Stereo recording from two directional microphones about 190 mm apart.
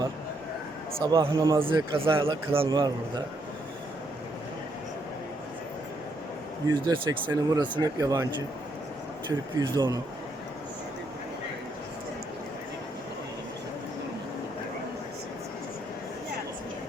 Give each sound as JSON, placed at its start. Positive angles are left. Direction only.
{"t": 1.0, "sound": "a man's voice", "side_deg": -20}
{"t": 6.7, "sound": "a man's voice", "side_deg": -20}
{"t": 9.6, "sound": "a man's voice", "side_deg": -20}